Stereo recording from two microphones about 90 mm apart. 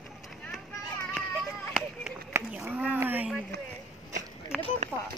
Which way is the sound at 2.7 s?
20° right (ahead or behind).